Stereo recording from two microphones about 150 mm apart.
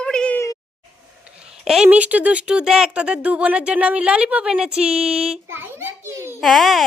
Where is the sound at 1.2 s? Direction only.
5° right (ahead or behind).